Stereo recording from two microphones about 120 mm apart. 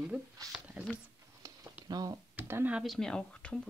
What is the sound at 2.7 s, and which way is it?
Speech, centre (ahead or behind).